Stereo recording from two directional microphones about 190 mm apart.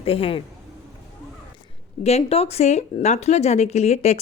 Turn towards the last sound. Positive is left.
turn(degrees=35)  # may be behind; listen again after turning